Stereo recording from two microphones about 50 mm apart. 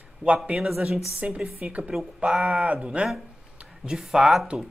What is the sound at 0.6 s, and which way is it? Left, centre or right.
Speech, centre.